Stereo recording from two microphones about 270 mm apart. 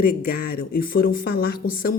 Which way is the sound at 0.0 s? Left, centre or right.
Left.